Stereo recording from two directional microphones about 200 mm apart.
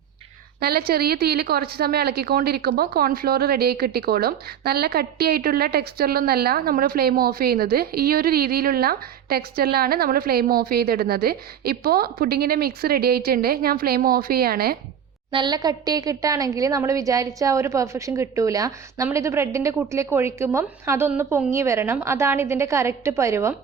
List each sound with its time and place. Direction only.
0.6 s a woman's voice: 50° right (ahead or behind)
15.3 s a woman's voice: 20° right (ahead or behind)